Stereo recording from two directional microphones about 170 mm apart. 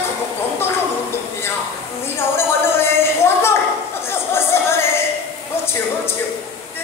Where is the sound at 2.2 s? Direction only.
15° left (ahead or behind).